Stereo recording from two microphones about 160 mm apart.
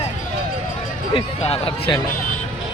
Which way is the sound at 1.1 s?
40° left (ahead or behind).